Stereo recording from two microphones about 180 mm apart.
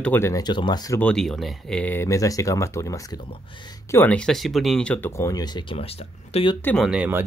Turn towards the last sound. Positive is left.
turn(degrees=-10)  # may be behind; listen again after turning